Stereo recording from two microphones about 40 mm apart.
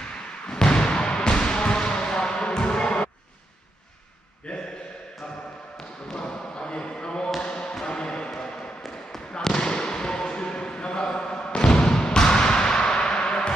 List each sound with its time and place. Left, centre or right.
0.5 s basketball bounce: centre
4.4 s a sound: left
6.0 s basketball bounce: centre
7.8 s music: left
8.3 s basketball bounce: centre